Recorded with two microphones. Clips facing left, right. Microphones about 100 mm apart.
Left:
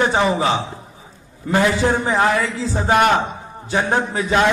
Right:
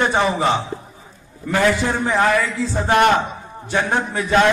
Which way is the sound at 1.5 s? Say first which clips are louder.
Left 1 dB; 20° left (ahead or behind).